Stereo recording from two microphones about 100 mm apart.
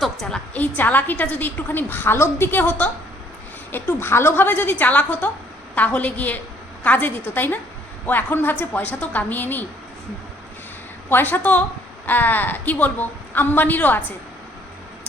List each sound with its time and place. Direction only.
0.0 s a woman's voice: 5° left (ahead or behind)
11.1 s a woman's voice: 20° left (ahead or behind)